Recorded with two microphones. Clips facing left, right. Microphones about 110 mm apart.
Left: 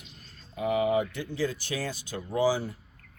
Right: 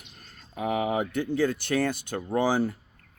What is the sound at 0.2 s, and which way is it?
Speech, 50° right (ahead or behind).